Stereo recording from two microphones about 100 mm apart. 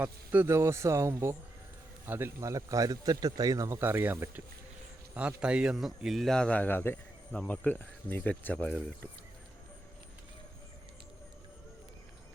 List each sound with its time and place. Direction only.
0.0 s speech: 15° right (ahead or behind)
0.4 s speech: 25° right (ahead or behind); by 8.7 s 15° left (ahead or behind)